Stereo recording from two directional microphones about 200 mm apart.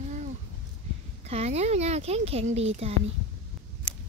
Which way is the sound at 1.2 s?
30° right (ahead or behind).